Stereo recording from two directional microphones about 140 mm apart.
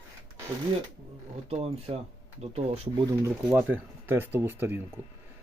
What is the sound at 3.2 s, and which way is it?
Speech, 15° right (ahead or behind).